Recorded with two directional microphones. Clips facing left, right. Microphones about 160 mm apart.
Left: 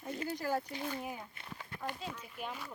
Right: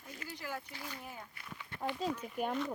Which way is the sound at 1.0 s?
20° left (ahead or behind).